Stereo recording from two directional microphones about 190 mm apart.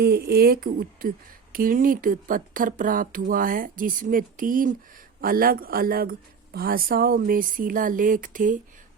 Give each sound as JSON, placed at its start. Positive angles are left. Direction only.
{"t": 0.0, "sound": "speech", "side_deg": -60}